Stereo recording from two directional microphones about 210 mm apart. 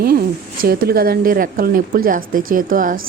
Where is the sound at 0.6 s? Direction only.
45° right (ahead or behind).